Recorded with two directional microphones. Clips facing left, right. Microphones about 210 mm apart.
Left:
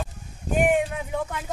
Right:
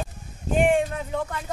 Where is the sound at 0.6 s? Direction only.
5° left (ahead or behind).